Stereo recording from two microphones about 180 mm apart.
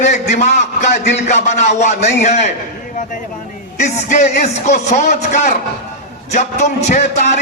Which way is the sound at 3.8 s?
40° left (ahead or behind).